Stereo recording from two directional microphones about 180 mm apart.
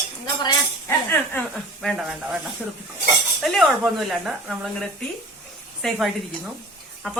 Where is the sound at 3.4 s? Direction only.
Centre (ahead or behind).